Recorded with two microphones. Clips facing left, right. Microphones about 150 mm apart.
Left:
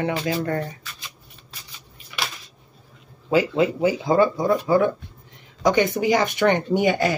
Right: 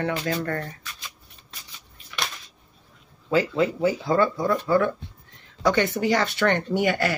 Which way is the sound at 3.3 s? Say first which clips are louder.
Left 3 dB; 15° left (ahead or behind).